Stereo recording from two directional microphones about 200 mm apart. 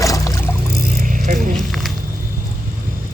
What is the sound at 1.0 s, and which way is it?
Vehicle, 40° right (ahead or behind).